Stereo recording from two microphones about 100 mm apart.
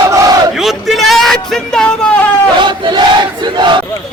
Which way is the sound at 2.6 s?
50° right (ahead or behind).